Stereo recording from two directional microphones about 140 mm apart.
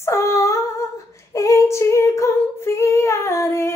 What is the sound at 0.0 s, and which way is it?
Female singing, 20° left (ahead or behind).